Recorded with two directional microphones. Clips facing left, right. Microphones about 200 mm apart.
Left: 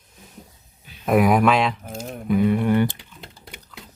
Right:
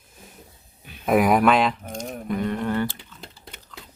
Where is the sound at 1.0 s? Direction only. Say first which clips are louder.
Left 1 dB; centre (ahead or behind); by 3.2 s 15° left (ahead or behind).